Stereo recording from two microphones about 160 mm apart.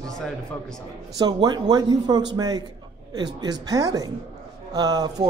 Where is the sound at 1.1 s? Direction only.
25° right (ahead or behind).